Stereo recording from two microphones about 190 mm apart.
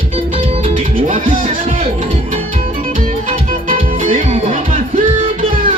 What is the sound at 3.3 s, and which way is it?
Music, 30° right (ahead or behind).